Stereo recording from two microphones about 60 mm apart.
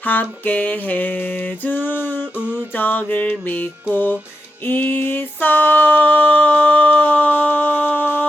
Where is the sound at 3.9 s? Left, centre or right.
Left.